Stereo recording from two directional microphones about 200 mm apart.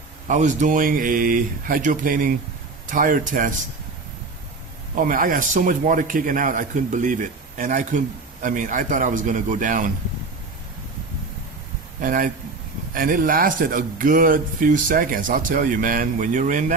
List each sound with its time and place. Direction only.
0.3 s speech: 40° right (ahead or behind)
4.9 s a man's voice: 45° right (ahead or behind)
11.9 s speech: 45° right (ahead or behind)